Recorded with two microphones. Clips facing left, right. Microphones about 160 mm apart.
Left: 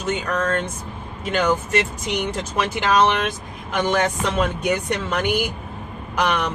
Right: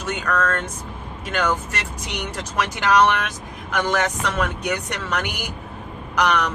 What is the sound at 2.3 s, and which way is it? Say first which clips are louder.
Speech: left 2 dB; 25° left (ahead or behind).